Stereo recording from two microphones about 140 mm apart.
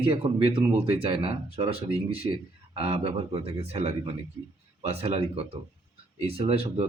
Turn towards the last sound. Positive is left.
turn(degrees=-45)  # may be behind; listen again after turning